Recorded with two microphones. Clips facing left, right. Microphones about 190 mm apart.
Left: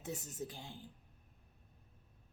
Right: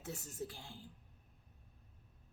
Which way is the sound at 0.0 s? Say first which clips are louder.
Left 1 dB; 20° left (ahead or behind).